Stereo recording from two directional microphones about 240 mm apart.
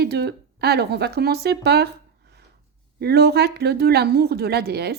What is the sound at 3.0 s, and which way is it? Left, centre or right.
A woman's voice, right.